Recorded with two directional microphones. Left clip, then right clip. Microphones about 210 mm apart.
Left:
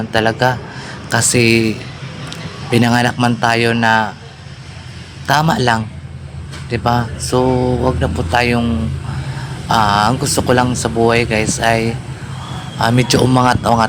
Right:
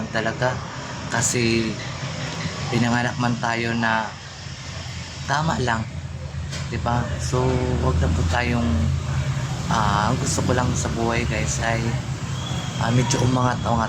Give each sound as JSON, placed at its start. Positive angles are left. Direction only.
{"t": 0.1, "sound": "a man's voice", "side_deg": 40}
{"t": 2.7, "sound": "speech", "side_deg": 45}
{"t": 5.3, "sound": "a man's voice", "side_deg": 40}
{"t": 9.6, "sound": "a man's voice", "side_deg": 45}